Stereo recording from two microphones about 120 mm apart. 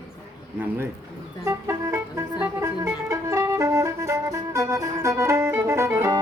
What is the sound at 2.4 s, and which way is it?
Music, 20° right (ahead or behind).